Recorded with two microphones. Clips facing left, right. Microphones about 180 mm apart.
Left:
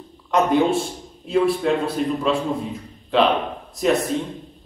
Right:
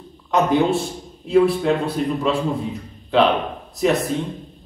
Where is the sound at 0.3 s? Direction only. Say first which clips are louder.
Even; centre (ahead or behind).